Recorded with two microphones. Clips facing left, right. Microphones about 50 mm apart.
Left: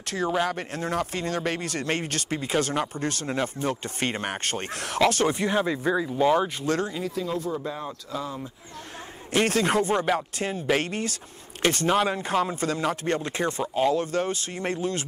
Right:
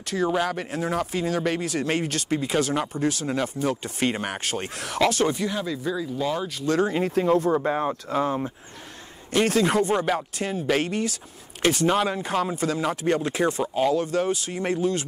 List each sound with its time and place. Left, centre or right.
0.0 s speech: centre
5.3 s speech: left
6.9 s speech: right
9.3 s speech: centre